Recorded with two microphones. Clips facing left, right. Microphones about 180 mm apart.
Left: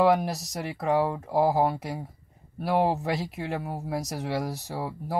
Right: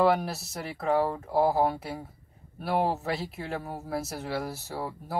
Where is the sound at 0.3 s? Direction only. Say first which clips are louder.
Left 3 dB; 15° left (ahead or behind).